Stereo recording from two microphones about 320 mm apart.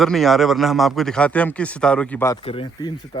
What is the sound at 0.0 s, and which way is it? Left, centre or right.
A man's voice, centre.